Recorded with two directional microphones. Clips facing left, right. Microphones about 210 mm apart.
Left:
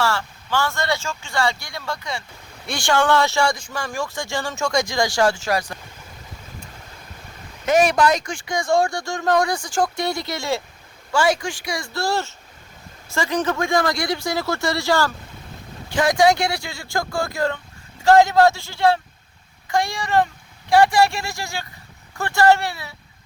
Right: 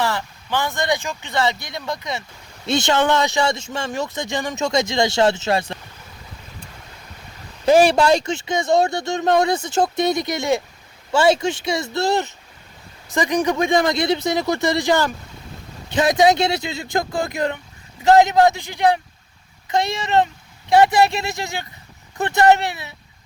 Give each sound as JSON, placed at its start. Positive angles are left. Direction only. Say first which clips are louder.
{"t": 0.0, "sound": "speech", "louder": "even", "side_deg": -20}
{"t": 7.6, "sound": "a man's voice", "louder": "right 3 dB", "side_deg": -30}